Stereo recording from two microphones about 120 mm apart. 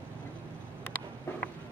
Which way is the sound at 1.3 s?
15° left (ahead or behind).